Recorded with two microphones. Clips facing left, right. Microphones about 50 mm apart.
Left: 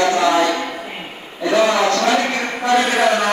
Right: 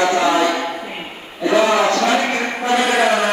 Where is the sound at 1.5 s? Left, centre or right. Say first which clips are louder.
Right 1 dB; centre.